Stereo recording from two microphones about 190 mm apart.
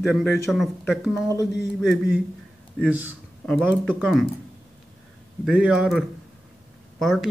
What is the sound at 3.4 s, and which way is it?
Speech, 5° right (ahead or behind).